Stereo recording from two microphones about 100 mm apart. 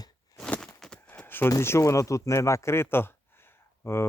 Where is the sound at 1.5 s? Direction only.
30° left (ahead or behind).